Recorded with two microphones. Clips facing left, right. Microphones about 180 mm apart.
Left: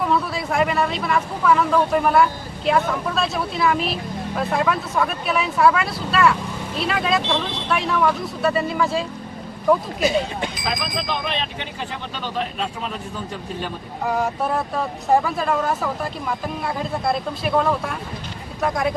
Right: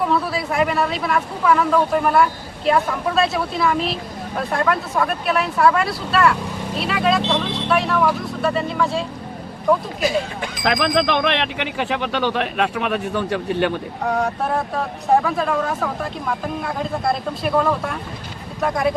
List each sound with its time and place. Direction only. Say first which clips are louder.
0.1 s speech: right 1 dB; centre (ahead or behind)
10.0 s speech: left 1 dB; 25° left (ahead or behind)
10.6 s speech: right 8 dB; 70° right (ahead or behind)
15.1 s speech: right 1 dB; centre (ahead or behind)